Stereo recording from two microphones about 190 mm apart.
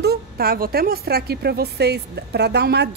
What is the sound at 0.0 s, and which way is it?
Speech, 55° right (ahead or behind).